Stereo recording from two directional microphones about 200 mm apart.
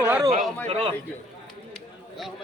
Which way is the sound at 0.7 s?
30° right (ahead or behind).